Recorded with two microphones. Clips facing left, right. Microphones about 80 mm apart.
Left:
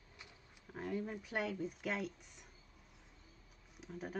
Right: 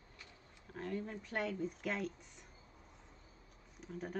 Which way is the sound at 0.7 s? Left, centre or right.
Centre.